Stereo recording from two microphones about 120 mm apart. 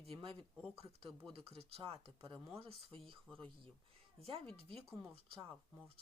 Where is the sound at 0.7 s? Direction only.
55° right (ahead or behind).